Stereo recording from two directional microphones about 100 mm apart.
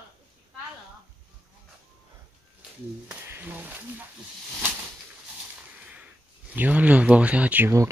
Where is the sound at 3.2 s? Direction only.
20° right (ahead or behind).